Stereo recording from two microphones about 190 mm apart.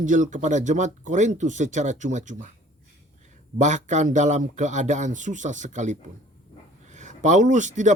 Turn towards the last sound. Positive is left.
turn(degrees=-40)  # may be behind; listen again after turning